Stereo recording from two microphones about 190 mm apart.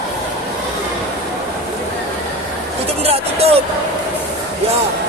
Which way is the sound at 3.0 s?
30° right (ahead or behind).